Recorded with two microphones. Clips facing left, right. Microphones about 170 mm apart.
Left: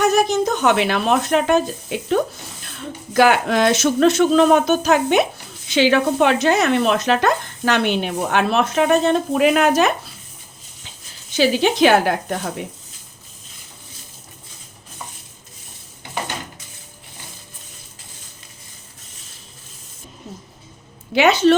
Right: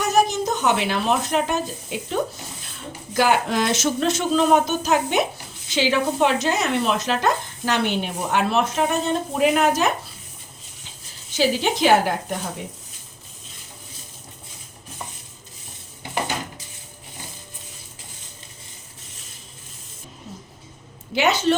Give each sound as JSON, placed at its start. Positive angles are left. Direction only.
{"t": 0.0, "sound": "speech", "side_deg": 65}
{"t": 3.1, "sound": "speech", "side_deg": 75}
{"t": 11.3, "sound": "speech", "side_deg": 75}
{"t": 21.2, "sound": "speech", "side_deg": 70}